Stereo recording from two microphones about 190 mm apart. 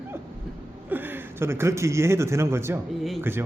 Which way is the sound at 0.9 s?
10° right (ahead or behind).